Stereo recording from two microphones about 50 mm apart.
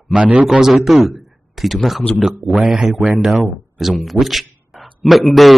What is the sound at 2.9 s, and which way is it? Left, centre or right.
Speech, right.